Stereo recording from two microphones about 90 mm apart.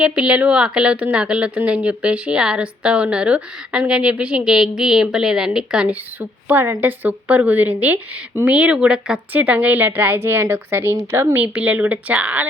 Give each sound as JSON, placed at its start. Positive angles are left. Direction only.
{"t": 0.0, "sound": "a woman's voice", "side_deg": -10}